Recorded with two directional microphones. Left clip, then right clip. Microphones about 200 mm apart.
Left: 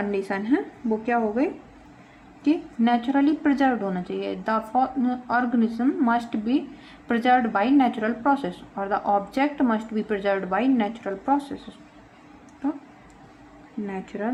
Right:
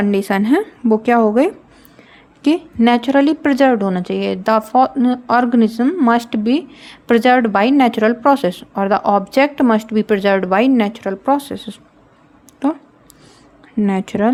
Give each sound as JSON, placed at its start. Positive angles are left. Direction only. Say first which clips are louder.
{"t": 0.0, "sound": "speech", "louder": "right 10 dB", "side_deg": -60}
{"t": 13.8, "sound": "speech", "louder": "right 13 dB", "side_deg": -60}